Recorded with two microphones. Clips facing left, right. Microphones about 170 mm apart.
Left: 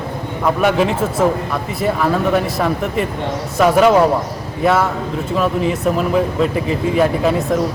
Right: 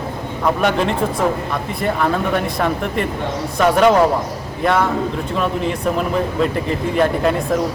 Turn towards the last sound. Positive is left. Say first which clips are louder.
# left 1 dB
turn(degrees=5)  # may be behind; listen again after turning